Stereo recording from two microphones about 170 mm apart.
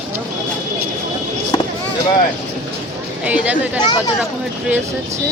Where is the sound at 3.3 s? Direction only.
10° right (ahead or behind).